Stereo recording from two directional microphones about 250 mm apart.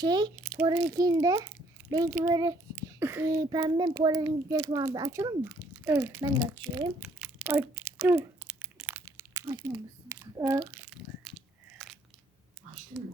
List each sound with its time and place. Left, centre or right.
0.0 s a child's voice: centre
0.4 s a sound: centre
0.9 s a child's voice: centre